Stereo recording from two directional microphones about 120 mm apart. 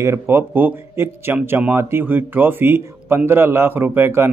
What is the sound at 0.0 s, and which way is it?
A man's voice, 20° right (ahead or behind).